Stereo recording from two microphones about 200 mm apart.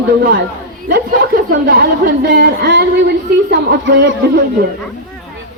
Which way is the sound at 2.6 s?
60° right (ahead or behind).